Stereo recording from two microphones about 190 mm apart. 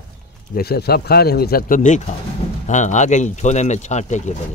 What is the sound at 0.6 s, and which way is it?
Speech, 55° left (ahead or behind).